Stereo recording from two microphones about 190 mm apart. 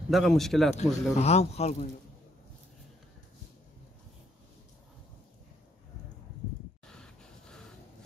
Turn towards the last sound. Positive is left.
turn(degrees=5)  # may be behind; listen again after turning